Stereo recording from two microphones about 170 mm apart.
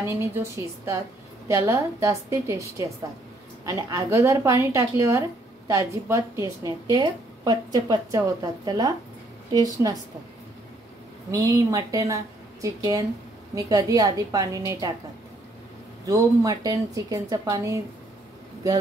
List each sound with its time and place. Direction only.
0.0 s a woman's voice: 15° right (ahead or behind)
11.3 s a woman's voice: 20° right (ahead or behind)
16.1 s a woman's voice: 20° right (ahead or behind)